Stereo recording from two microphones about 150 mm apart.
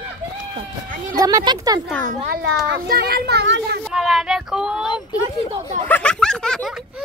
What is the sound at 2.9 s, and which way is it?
Speech, 90° right.